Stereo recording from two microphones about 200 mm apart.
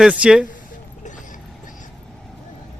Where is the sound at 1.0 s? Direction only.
40° left (ahead or behind).